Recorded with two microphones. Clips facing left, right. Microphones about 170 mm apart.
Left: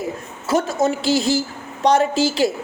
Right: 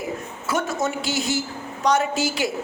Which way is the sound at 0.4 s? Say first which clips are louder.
Left 6 dB; 30° left (ahead or behind).